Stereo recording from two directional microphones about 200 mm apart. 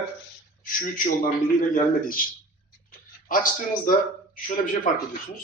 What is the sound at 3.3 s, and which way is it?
Speech, 45° left (ahead or behind).